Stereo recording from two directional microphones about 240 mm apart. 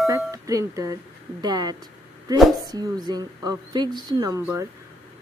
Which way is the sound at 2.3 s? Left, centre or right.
Centre.